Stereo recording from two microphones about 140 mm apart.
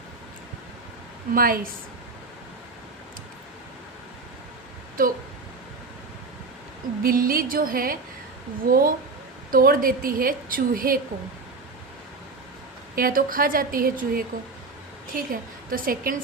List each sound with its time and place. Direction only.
1.3 s a woman's voice: 90° right
5.0 s speech: 80° right
7.0 s a woman's voice: 90° right
13.0 s a woman's voice: 90° right